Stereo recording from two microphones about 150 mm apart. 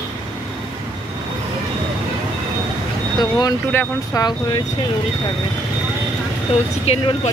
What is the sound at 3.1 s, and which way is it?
Speech, 30° left (ahead or behind).